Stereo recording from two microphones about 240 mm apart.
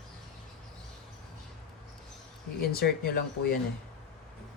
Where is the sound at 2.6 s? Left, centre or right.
Left.